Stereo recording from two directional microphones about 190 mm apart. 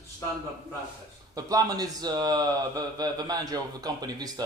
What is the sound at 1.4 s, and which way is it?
A man's voice, 20° right (ahead or behind).